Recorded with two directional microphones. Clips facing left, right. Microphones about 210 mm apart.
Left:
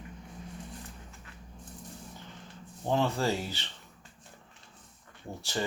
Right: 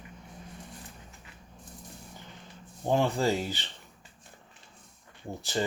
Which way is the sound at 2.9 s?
15° right (ahead or behind).